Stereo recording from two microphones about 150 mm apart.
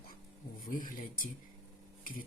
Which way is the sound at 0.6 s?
65° left (ahead or behind).